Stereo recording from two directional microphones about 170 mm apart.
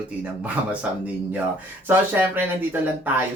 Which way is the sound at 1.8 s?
10° right (ahead or behind).